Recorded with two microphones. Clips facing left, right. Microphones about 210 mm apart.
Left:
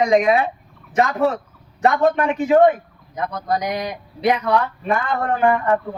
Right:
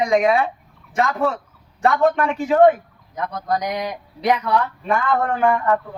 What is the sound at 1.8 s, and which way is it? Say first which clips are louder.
Speech: left 1 dB; 20° left (ahead or behind).